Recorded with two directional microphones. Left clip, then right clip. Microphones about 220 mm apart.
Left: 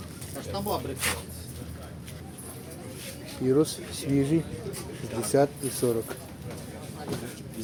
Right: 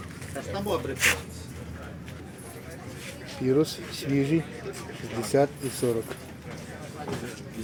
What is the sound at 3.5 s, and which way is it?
Speech, 5° right (ahead or behind).